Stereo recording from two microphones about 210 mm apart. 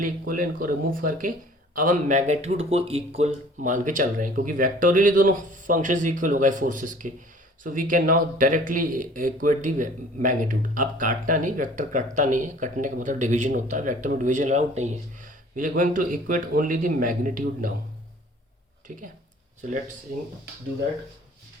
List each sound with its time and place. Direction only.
0.0 s speech: 40° right (ahead or behind)